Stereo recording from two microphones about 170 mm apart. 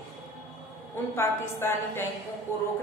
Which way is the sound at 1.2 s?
15° left (ahead or behind).